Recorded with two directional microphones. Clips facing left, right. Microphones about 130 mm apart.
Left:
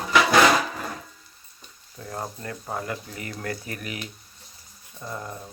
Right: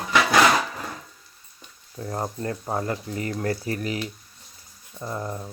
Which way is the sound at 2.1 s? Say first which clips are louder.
Right 5 dB; 30° right (ahead or behind).